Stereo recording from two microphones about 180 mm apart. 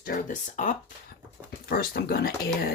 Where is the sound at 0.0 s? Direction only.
45° left (ahead or behind).